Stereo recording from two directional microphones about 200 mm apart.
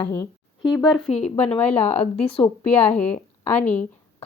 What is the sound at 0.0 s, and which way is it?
A woman's voice, 10° left (ahead or behind).